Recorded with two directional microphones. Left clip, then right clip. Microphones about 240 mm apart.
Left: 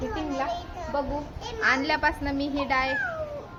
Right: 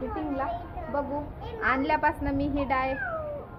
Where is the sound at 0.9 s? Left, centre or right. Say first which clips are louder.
Left 1 dB; centre.